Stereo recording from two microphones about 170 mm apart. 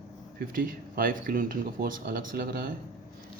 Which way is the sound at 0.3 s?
55° right (ahead or behind).